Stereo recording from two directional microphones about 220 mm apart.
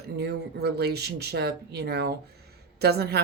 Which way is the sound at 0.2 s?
50° right (ahead or behind).